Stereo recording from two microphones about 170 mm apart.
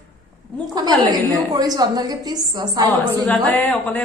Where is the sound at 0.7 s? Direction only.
25° right (ahead or behind).